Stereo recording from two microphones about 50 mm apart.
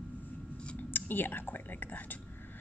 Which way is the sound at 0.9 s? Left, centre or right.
Left.